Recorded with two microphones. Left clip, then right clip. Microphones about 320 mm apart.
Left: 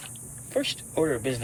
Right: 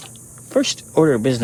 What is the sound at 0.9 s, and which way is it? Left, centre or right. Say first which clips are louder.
Speech: right 11 dB; right.